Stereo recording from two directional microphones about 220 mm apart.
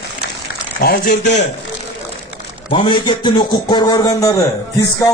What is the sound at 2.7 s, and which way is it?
A man's voice, 20° left (ahead or behind).